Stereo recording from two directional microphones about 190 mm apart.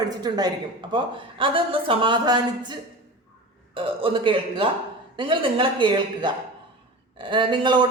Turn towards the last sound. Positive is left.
turn(degrees=-25)  # may be behind; listen again after turning